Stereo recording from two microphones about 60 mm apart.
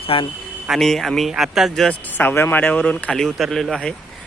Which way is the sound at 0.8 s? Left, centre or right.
Centre.